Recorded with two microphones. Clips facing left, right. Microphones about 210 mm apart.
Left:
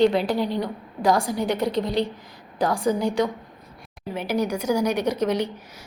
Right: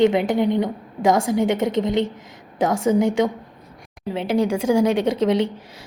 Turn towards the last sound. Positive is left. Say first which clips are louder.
# right 4 dB
turn(degrees=-25)  # may be behind; listen again after turning